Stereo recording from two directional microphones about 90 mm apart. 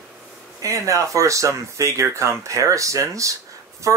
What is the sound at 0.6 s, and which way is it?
Speech, 35° right (ahead or behind).